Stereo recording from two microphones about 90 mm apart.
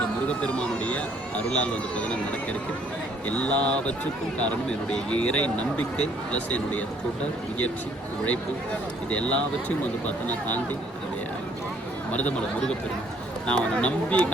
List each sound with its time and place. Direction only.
0.4 s speech: 10° left (ahead or behind)
9.0 s speech: 15° left (ahead or behind)
13.5 s speech: 10° left (ahead or behind)